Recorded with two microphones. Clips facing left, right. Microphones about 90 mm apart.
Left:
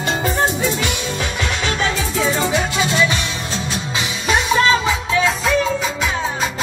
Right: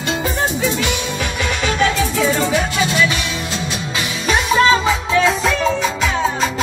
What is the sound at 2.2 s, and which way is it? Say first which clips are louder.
Music: even; 15° left (ahead or behind).